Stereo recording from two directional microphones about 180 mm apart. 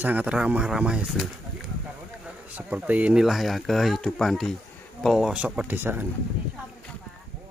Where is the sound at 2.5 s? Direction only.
10° right (ahead or behind).